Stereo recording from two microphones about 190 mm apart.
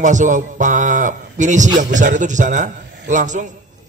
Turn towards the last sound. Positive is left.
turn(degrees=-40)  # may be behind; listen again after turning